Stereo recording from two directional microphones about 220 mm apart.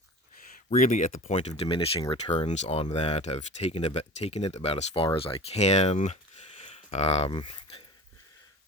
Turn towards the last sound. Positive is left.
turn(degrees=25)  # may be behind; listen again after turning